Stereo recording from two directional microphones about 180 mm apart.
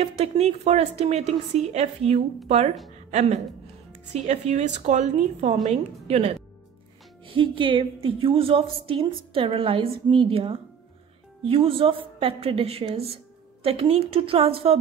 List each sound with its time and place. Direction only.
0.2 s a woman's voice: 35° right (ahead or behind)